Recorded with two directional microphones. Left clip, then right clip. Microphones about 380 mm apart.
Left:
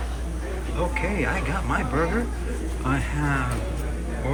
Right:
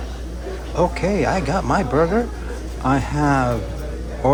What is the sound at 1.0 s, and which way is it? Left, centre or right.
Speech, centre.